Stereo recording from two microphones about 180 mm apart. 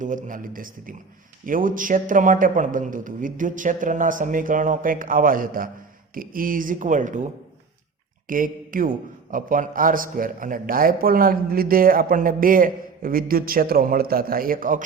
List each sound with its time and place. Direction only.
0.0 s a man's voice: 45° right (ahead or behind)
8.3 s a man's voice: 50° right (ahead or behind)